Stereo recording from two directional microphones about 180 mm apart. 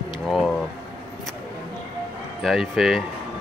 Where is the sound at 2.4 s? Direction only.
Centre (ahead or behind).